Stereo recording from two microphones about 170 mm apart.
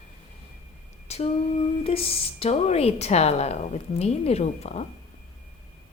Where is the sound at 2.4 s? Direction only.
40° left (ahead or behind).